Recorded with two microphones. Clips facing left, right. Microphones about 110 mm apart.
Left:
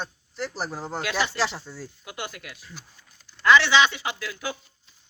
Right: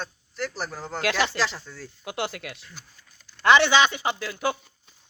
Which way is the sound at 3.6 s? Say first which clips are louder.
Right 1 dB; 45° right (ahead or behind).